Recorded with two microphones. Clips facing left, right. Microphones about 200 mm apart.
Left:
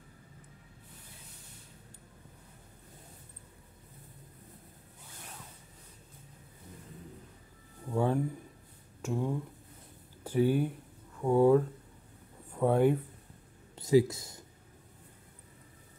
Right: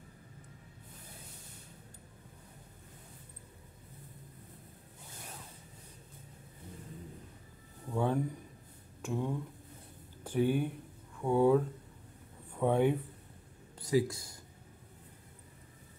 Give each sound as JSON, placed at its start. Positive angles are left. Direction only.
{"t": 7.9, "sound": "a sound", "side_deg": 10}
{"t": 9.0, "sound": "speech", "side_deg": 10}
{"t": 13.7, "sound": "speech", "side_deg": 25}